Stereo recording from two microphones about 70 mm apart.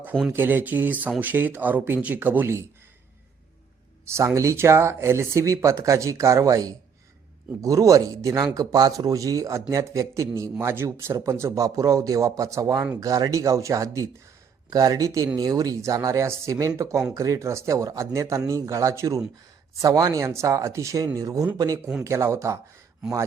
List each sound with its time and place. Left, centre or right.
0.3 s speech: right
4.0 s speech: right
8.5 s speech: right
10.6 s speech: right
15.8 s speech: right
20.2 s speech: right
22.0 s speech: right